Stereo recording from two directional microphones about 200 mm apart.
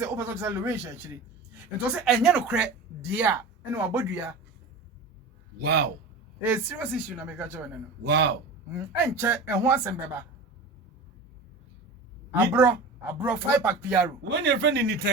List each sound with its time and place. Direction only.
0.0 s speech: 10° right (ahead or behind)
5.6 s a man's voice: 55° right (ahead or behind)
6.4 s speech: 10° right (ahead or behind)
8.0 s speech: 60° right (ahead or behind)
8.7 s speech: 10° right (ahead or behind)
12.5 s speech: 10° right (ahead or behind)
14.4 s speech: 60° right (ahead or behind)